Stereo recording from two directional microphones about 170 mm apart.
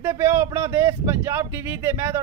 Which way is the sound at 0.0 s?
15° right (ahead or behind).